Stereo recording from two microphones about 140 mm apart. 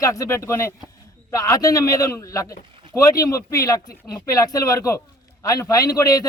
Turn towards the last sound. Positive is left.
turn(degrees=25)  # may be behind; listen again after turning